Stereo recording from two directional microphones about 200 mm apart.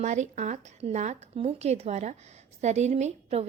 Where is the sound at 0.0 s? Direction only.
35° right (ahead or behind).